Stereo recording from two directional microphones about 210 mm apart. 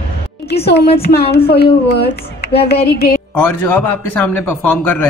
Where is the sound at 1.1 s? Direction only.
50° left (ahead or behind).